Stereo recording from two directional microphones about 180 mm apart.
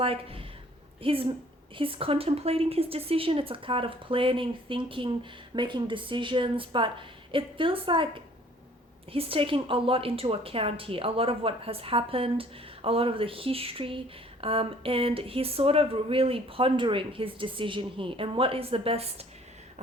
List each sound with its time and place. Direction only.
0.0 s a woman's voice: 30° right (ahead or behind)